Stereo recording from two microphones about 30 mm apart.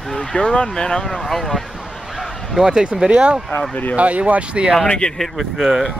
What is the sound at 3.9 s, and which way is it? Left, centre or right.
Speech, right.